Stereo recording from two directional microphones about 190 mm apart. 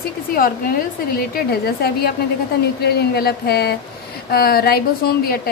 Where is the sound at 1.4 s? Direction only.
55° left (ahead or behind).